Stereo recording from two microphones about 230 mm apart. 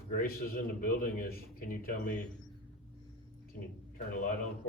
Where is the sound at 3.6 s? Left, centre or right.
Left.